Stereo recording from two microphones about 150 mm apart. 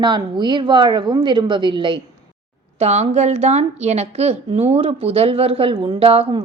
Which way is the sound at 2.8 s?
45° right (ahead or behind).